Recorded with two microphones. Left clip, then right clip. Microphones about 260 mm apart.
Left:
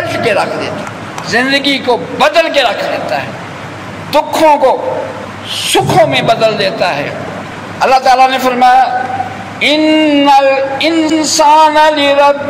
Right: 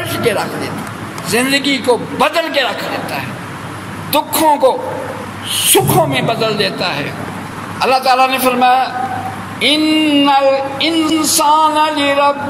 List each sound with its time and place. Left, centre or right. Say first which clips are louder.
0.1 s a man's voice: left 4 dB; right
4.1 s a man's voice: left 5 dB; right